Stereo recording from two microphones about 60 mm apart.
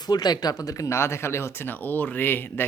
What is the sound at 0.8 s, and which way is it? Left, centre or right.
Speech, left.